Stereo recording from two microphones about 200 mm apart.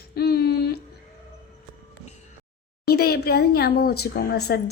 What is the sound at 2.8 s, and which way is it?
Speech, 50° left (ahead or behind).